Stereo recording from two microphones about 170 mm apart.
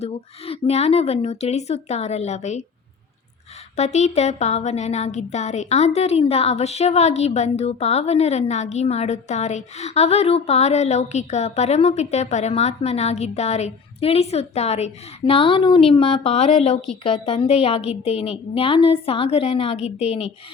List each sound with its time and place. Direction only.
0.0 s speech: 35° left (ahead or behind)
3.8 s speech: 40° left (ahead or behind)